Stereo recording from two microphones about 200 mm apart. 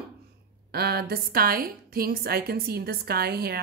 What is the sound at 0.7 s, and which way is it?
A woman's voice, 50° right (ahead or behind).